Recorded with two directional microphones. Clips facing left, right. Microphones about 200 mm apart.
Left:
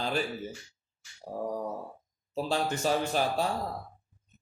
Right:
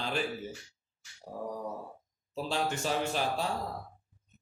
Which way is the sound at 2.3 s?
40° left (ahead or behind).